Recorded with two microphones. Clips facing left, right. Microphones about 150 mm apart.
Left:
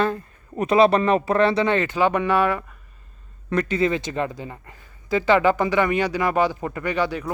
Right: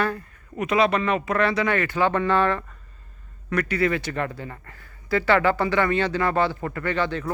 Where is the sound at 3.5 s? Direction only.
25° left (ahead or behind).